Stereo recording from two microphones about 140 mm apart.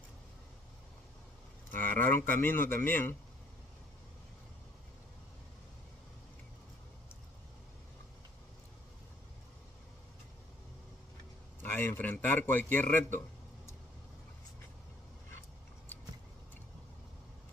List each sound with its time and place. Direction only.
1.7 s a man's voice: 15° left (ahead or behind)
11.6 s a man's voice: 15° left (ahead or behind)